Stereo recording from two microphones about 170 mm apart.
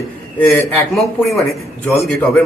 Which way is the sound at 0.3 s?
15° left (ahead or behind).